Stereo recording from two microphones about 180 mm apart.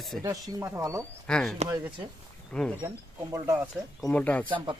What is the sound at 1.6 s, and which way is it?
Speech, 15° right (ahead or behind).